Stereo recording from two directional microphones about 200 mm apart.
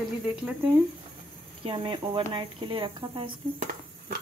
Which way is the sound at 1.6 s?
25° right (ahead or behind).